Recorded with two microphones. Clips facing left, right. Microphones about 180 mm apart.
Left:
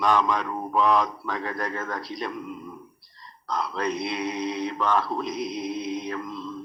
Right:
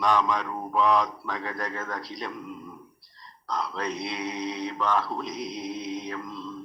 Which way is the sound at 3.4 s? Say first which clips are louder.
Left 3 dB; 60° left (ahead or behind).